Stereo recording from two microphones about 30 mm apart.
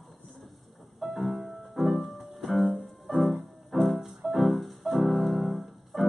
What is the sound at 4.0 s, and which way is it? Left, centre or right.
Music, centre.